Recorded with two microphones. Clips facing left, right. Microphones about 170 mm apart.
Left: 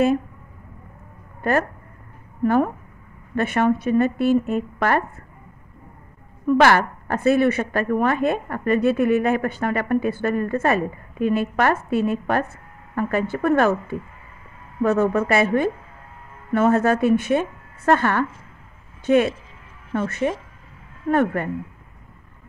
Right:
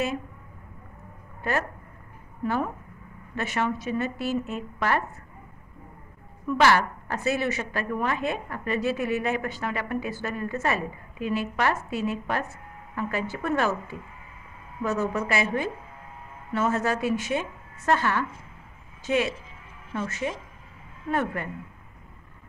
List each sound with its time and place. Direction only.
1.5 s a woman's voice: 50° left (ahead or behind)
6.4 s a woman's voice: 55° left (ahead or behind)